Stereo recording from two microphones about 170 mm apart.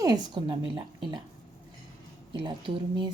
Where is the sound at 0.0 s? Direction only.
25° right (ahead or behind).